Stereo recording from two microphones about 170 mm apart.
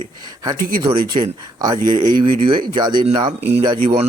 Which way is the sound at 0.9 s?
30° right (ahead or behind).